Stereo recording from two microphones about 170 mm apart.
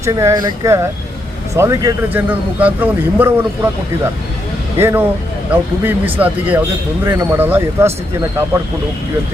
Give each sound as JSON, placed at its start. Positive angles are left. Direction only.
{"t": 0.0, "sound": "a man's voice", "side_deg": -20}
{"t": 4.8, "sound": "a man's voice", "side_deg": -15}